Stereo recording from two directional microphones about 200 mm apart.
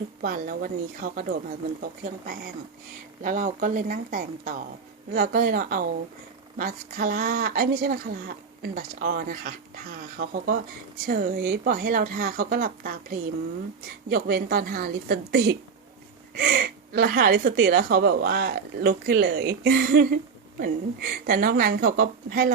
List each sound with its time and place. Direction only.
0.2 s speech: 45° right (ahead or behind)
16.9 s speech: 45° right (ahead or behind)